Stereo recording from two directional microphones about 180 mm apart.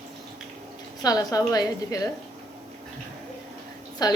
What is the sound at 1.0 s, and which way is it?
Speech, 20° left (ahead or behind).